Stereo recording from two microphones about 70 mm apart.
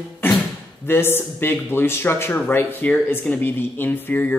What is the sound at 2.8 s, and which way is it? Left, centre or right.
Speech, left.